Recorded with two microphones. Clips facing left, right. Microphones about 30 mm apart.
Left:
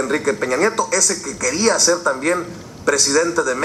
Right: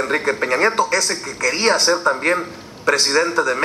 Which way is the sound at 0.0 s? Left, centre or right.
Right.